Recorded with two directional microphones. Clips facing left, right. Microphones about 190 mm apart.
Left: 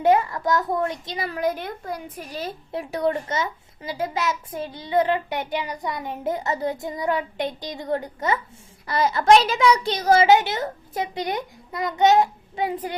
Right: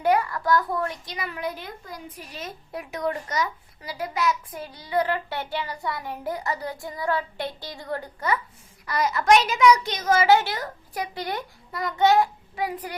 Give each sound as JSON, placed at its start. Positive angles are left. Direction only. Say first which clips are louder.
{"t": 0.0, "sound": "a woman's voice", "louder": "left 3 dB", "side_deg": 25}
{"t": 2.3, "sound": "a woman's voice", "louder": "left 6 dB", "side_deg": 30}
{"t": 10.2, "sound": "a woman's voice", "louder": "left 2 dB", "side_deg": 20}